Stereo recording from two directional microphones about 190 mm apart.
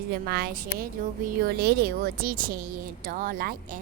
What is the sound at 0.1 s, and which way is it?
A woman's voice, 60° right (ahead or behind).